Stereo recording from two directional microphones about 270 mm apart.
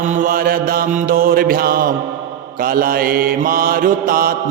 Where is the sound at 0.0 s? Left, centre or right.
Right.